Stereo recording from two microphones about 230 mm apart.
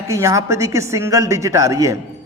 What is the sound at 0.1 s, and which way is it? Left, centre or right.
A man's voice, centre.